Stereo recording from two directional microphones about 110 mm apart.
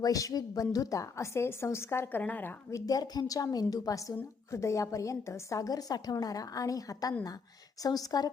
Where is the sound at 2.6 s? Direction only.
30° left (ahead or behind).